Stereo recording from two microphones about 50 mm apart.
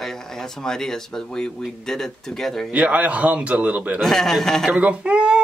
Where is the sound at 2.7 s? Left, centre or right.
Right.